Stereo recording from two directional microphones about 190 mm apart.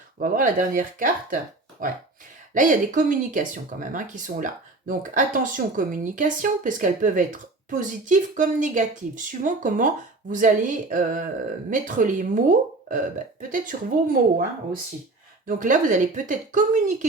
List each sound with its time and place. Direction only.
0.2 s speech: 45° right (ahead or behind)
15.4 s speech: 45° right (ahead or behind)